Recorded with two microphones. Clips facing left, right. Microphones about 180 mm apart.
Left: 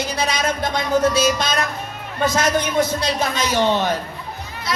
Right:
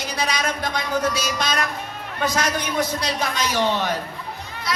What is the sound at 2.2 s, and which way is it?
A man's voice, 25° left (ahead or behind).